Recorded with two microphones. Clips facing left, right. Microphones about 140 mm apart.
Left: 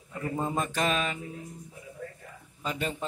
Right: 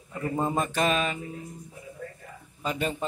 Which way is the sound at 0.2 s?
30° right (ahead or behind).